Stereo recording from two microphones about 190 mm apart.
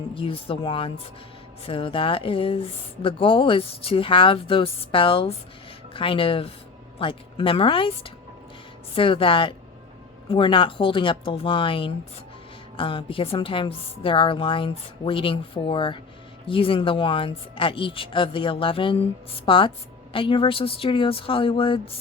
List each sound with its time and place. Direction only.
0.1 s speech: 25° left (ahead or behind)